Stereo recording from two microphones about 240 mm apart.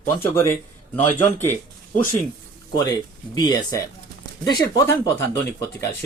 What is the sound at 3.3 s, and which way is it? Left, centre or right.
Speech, centre.